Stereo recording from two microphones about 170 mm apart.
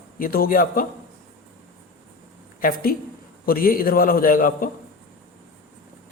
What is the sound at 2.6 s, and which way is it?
A man's voice, 60° left (ahead or behind).